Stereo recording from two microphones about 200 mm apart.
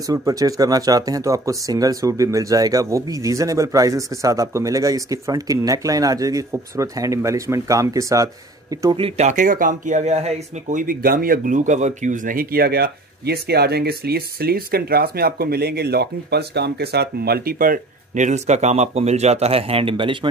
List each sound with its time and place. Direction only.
0.0 s speech: 15° right (ahead or behind)
8.9 s speech: 30° right (ahead or behind)